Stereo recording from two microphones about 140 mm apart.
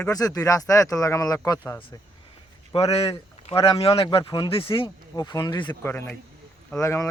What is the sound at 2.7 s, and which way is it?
Speech, 45° left (ahead or behind).